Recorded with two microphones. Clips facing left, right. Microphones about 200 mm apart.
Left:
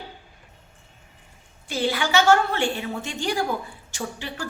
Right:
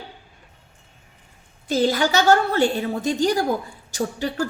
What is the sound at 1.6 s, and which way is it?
A woman's voice, 40° right (ahead or behind).